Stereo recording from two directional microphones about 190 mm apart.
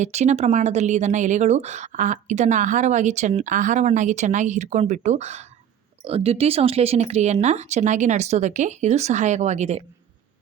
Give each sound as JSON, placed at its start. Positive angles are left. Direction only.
{"t": 0.0, "sound": "speech", "side_deg": -35}